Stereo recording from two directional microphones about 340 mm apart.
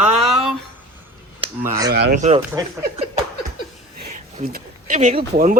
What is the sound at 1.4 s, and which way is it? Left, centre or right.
Speech, centre.